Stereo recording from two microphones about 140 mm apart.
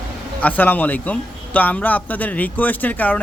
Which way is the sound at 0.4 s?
10° left (ahead or behind).